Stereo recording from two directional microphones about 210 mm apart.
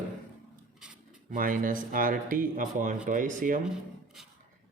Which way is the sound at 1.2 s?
40° right (ahead or behind).